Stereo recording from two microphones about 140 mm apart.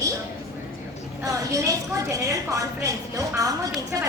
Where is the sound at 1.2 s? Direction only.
25° right (ahead or behind).